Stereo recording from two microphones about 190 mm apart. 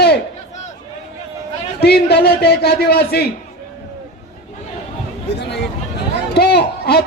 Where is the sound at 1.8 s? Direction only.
60° left (ahead or behind).